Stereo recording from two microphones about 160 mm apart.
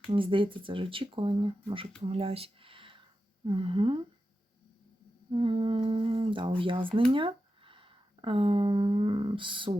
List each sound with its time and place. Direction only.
0.1 s speech: 30° right (ahead or behind)
5.3 s speech: 35° right (ahead or behind)